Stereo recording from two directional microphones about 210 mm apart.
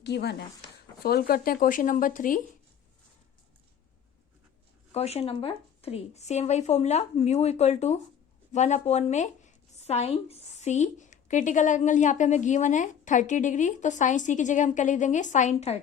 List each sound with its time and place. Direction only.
0.0 s speech: 50° left (ahead or behind)
4.9 s speech: 30° left (ahead or behind)